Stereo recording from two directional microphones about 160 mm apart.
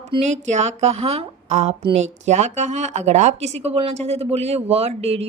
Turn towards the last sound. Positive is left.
turn(degrees=-40)  # may be behind; listen again after turning